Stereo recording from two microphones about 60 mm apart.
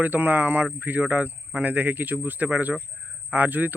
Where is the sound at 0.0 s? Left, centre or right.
Right.